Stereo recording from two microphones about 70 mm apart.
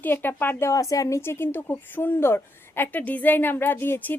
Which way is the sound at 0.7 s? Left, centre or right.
Left.